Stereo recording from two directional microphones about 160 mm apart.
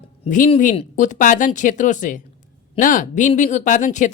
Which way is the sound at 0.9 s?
50° left (ahead or behind).